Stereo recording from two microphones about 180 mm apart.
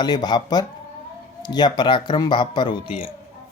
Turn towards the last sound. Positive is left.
turn(degrees=-5)  # may be behind; listen again after turning